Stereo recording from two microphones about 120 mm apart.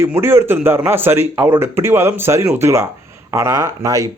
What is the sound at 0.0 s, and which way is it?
Speech, 20° right (ahead or behind).